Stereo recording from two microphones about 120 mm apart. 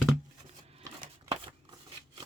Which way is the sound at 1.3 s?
45° right (ahead or behind).